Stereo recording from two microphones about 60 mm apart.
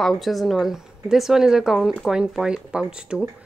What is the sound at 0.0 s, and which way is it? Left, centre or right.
Speech, centre.